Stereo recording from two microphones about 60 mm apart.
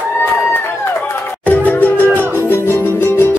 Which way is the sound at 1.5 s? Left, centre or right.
Left.